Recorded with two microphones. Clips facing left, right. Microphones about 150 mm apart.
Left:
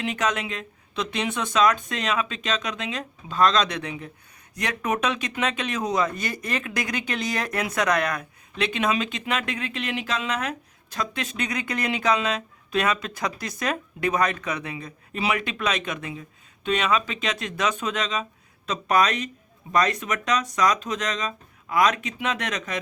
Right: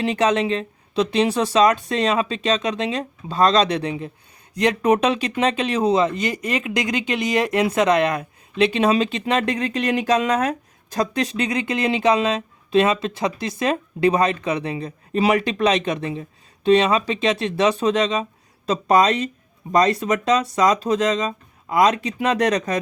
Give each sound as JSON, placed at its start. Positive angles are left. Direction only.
{"t": 0.0, "sound": "speech", "side_deg": -30}